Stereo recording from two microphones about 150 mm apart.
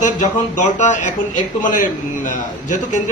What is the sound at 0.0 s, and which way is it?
A man's voice, 55° left (ahead or behind).